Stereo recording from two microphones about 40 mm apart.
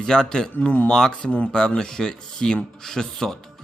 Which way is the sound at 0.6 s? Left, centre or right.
Left.